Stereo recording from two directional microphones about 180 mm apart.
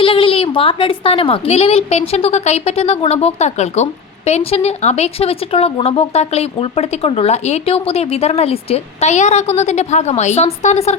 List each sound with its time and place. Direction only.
0.0 s speech: 30° left (ahead or behind)